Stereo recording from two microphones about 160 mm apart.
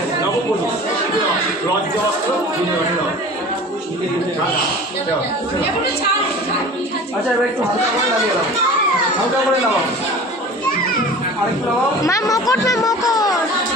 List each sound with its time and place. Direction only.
12.0 s speech: 20° left (ahead or behind)